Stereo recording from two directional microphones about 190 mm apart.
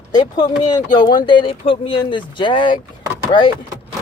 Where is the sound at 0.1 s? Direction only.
20° left (ahead or behind).